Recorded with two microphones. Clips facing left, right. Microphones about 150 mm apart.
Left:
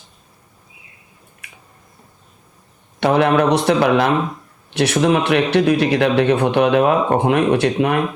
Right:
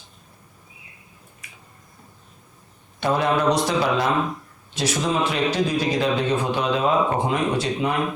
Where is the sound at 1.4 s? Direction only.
60° left (ahead or behind).